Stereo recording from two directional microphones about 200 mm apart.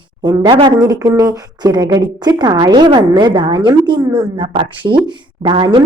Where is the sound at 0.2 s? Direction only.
25° right (ahead or behind).